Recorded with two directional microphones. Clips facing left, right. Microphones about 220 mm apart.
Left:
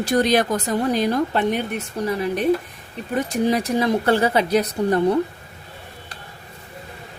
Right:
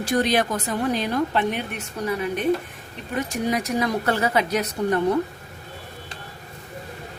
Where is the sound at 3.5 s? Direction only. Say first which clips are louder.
Left 1 dB; 30° left (ahead or behind).